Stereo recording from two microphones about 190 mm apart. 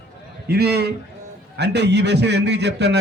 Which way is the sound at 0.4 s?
60° right (ahead or behind).